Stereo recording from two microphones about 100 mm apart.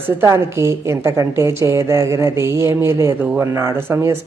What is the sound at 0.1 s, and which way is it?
A woman's voice, 25° right (ahead or behind).